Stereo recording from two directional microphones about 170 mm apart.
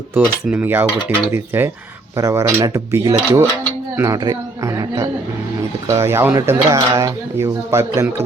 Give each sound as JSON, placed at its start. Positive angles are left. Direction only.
{"t": 0.1, "sound": "speech", "side_deg": -10}